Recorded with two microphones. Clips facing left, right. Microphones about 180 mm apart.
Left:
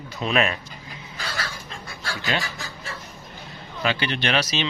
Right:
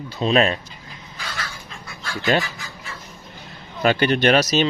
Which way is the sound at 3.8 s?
45° right (ahead or behind).